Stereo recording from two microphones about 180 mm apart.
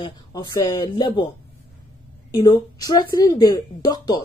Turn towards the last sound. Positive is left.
turn(degrees=20)  # may be behind; listen again after turning